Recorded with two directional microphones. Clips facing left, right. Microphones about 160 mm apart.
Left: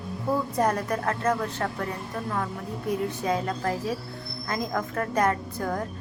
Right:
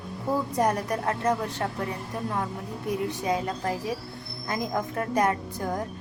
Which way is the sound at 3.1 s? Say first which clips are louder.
Even; 15° right (ahead or behind).